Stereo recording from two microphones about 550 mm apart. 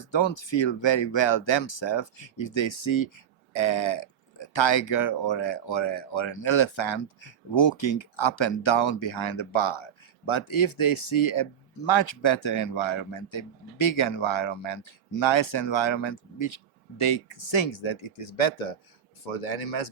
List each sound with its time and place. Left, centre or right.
0.1 s speech: left
17.0 s speech: left